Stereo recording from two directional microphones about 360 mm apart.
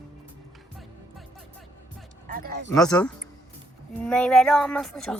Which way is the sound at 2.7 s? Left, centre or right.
Centre.